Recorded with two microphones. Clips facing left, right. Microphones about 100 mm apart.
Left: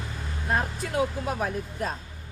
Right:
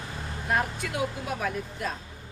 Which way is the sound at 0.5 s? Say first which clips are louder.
Left 1 dB; 35° left (ahead or behind).